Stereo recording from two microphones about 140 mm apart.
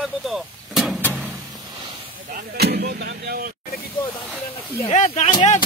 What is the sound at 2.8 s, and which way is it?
Speech, 90° right.